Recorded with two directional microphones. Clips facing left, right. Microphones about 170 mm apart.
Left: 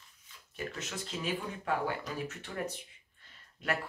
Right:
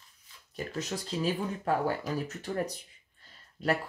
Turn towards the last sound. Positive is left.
turn(degrees=-35)  # may be behind; listen again after turning